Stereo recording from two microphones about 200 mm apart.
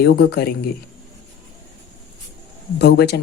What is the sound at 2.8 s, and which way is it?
Speech, 55° left (ahead or behind).